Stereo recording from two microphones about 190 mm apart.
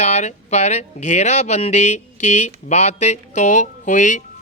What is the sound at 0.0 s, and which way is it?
Speech, 40° left (ahead or behind).